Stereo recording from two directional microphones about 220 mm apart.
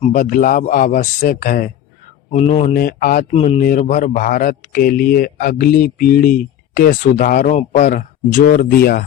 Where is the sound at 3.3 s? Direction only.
25° left (ahead or behind).